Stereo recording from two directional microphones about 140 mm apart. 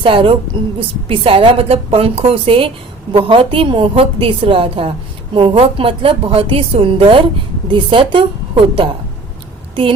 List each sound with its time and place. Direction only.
0.0 s a woman's voice: 40° right (ahead or behind)